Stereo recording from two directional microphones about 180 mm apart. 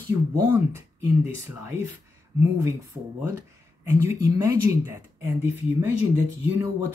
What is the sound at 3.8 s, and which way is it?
Speech, 15° right (ahead or behind).